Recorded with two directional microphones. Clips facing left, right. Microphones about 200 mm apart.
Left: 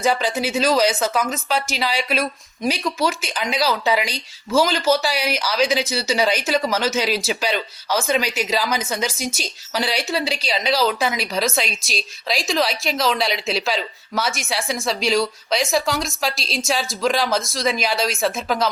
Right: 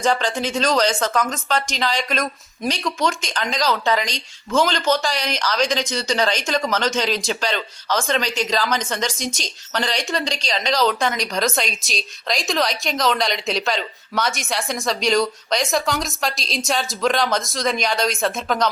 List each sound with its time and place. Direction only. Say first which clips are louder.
0.0 s speech: even; 10° left (ahead or behind)